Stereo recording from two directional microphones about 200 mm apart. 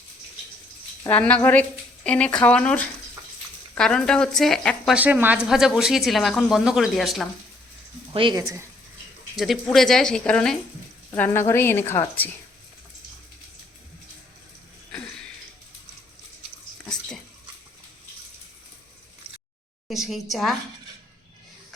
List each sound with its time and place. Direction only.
1.0 s a woman's voice: 5° left (ahead or behind)
4.9 s a woman's voice: 10° right (ahead or behind)
8.1 s speech: 25° right (ahead or behind)
9.3 s a woman's voice: centre (ahead or behind)
14.9 s a sound: 5° left (ahead or behind)
19.9 s speech: centre (ahead or behind)